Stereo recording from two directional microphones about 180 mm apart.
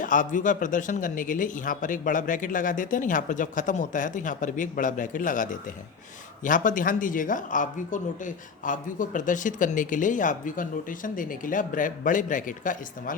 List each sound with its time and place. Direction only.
0.0 s speech: 45° left (ahead or behind)